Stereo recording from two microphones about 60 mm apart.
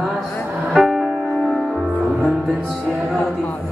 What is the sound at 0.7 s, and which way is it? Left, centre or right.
Music, centre.